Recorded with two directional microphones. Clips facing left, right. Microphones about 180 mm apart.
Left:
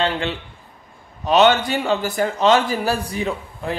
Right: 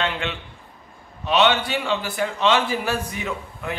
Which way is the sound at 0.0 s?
35° left (ahead or behind).